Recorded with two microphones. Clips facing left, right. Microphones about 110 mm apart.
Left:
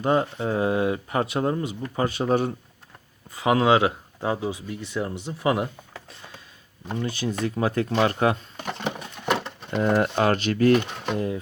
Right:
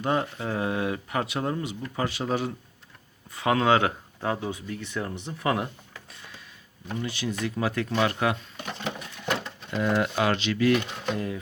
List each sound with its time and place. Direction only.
0.0 s speech: 25° left (ahead or behind)
3.3 s speech: 20° left (ahead or behind)
6.8 s speech: 40° left (ahead or behind)
8.8 s a sound: 60° left (ahead or behind)
9.8 s speech: 40° left (ahead or behind)
10.8 s speech: 25° left (ahead or behind)